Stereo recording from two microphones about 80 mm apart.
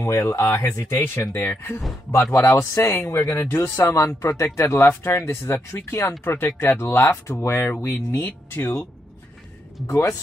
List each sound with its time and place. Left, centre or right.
0.0 s speech: left
3.3 s speech: left
9.8 s speech: left